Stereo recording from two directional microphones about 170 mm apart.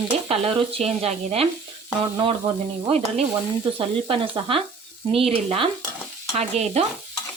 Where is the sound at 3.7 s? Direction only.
30° right (ahead or behind).